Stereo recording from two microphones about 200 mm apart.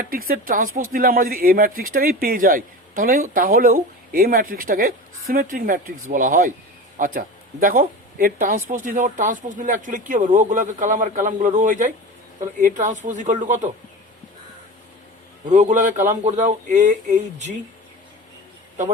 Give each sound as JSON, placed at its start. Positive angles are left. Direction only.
{"t": 0.0, "sound": "speech", "side_deg": -45}
{"t": 15.5, "sound": "speech", "side_deg": -40}